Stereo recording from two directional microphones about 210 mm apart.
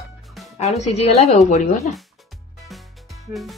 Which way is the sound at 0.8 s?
30° left (ahead or behind).